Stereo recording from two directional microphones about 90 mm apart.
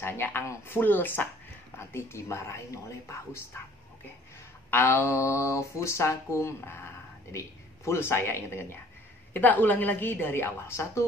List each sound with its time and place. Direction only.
0.0 s a woman's voice: 25° left (ahead or behind)
4.6 s a woman's voice: 25° left (ahead or behind)